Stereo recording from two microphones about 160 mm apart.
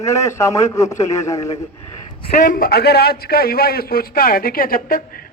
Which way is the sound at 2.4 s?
60° left (ahead or behind).